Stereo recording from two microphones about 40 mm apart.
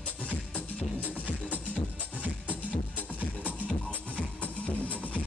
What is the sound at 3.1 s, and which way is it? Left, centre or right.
Music, left.